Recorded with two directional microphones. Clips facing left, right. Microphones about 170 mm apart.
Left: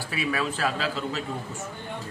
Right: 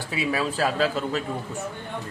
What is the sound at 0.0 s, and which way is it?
A man's voice, 25° right (ahead or behind).